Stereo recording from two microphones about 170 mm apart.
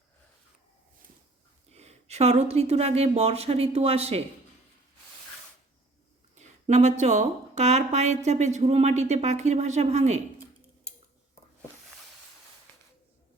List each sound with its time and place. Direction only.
1.7 s a woman's voice: 40° right (ahead or behind)
6.3 s a woman's voice: 45° right (ahead or behind)